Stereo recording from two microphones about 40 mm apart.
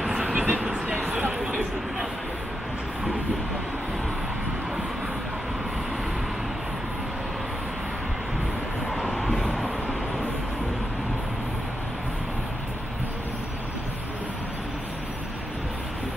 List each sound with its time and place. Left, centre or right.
0.3 s vehicle: right
9.1 s vehicle: centre